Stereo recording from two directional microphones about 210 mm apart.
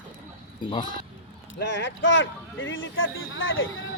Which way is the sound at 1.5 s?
55° left (ahead or behind).